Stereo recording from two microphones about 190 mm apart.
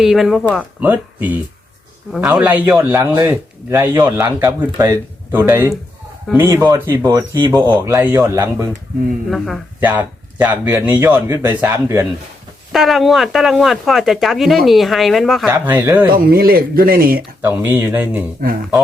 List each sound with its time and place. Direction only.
0.0 s speech: centre (ahead or behind)
0.8 s speech: 10° right (ahead or behind)
12.7 s speech: centre (ahead or behind)
15.4 s speech: 10° right (ahead or behind)
16.1 s speech: 50° right (ahead or behind)
17.2 s speech: 10° right (ahead or behind)
18.4 s speech: 55° right (ahead or behind)